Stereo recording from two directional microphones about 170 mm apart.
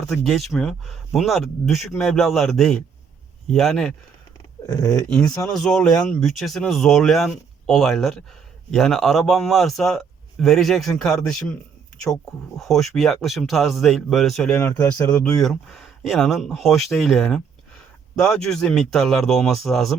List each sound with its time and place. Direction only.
0.1 s speech: centre (ahead or behind)
4.6 s speech: 20° left (ahead or behind)
5.3 s speech: 5° left (ahead or behind)
14.5 s speech: 10° left (ahead or behind)